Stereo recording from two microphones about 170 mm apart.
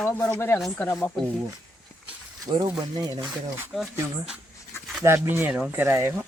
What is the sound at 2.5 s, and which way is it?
Speech, 25° right (ahead or behind).